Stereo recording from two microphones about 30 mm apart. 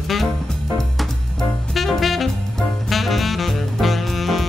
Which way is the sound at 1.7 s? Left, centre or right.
Centre.